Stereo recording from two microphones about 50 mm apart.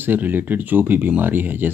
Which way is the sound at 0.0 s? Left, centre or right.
Right.